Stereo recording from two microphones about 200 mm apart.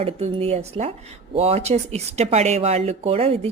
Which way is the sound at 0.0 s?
30° right (ahead or behind).